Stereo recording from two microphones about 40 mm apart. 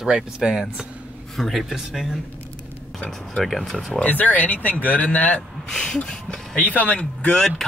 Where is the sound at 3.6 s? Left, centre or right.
Centre.